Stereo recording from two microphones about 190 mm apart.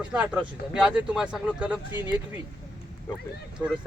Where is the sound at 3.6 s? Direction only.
5° right (ahead or behind).